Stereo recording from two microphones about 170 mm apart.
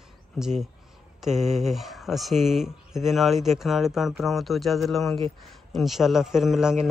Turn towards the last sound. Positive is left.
turn(degrees=-5)  # may be behind; listen again after turning